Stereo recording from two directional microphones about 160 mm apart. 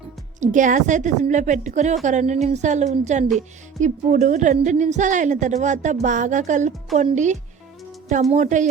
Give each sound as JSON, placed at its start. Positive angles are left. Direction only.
{"t": 0.3, "sound": "a woman's voice", "side_deg": -55}